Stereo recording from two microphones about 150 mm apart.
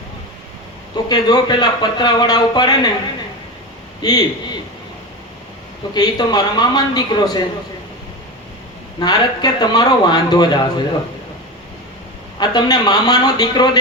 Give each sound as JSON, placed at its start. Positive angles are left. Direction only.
{"t": 1.0, "sound": "speech", "side_deg": 30}
{"t": 4.0, "sound": "speech", "side_deg": 25}
{"t": 5.9, "sound": "speech", "side_deg": 25}
{"t": 9.0, "sound": "speech", "side_deg": 25}
{"t": 12.4, "sound": "speech", "side_deg": 25}